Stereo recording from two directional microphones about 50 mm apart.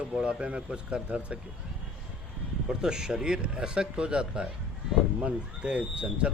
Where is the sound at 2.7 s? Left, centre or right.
Centre.